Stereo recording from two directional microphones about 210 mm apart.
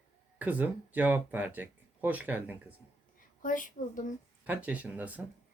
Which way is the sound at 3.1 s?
40° left (ahead or behind).